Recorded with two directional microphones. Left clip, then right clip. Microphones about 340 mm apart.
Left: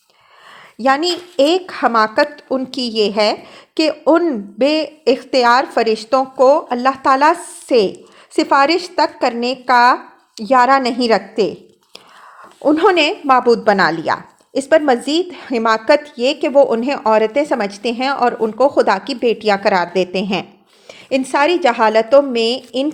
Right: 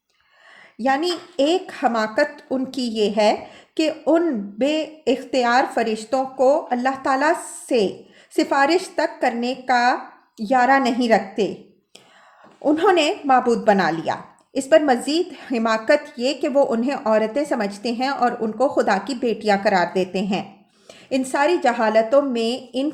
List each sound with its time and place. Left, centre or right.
0.8 s a woman's voice: centre
12.6 s speech: centre